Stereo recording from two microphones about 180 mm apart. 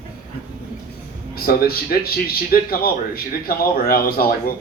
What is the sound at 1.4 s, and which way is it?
A man's voice, 55° left (ahead or behind).